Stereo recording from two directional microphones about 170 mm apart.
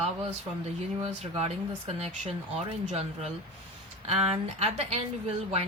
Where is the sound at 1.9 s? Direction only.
40° right (ahead or behind).